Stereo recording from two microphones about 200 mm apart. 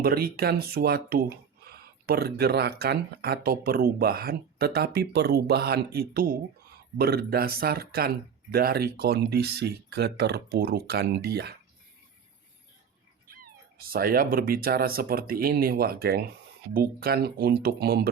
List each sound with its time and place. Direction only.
0.0 s speech: 50° right (ahead or behind)
13.3 s speech: 45° right (ahead or behind)